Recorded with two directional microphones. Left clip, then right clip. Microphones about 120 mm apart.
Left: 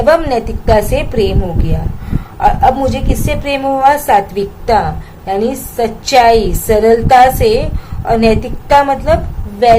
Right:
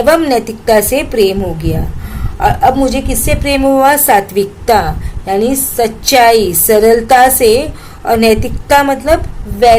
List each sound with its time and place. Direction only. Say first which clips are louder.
0.0 s a woman's voice: right 1 dB; 40° right (ahead or behind)